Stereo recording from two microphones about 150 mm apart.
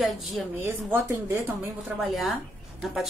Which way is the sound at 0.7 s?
15° right (ahead or behind).